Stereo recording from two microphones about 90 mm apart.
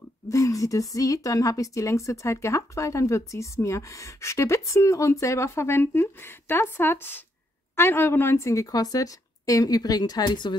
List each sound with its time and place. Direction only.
0.3 s speech: 35° left (ahead or behind); by 10.5 s 55° left (ahead or behind)